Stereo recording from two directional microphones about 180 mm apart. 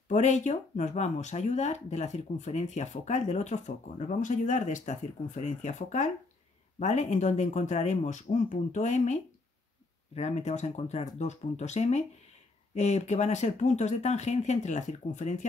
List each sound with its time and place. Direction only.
0.1 s speech: 40° left (ahead or behind)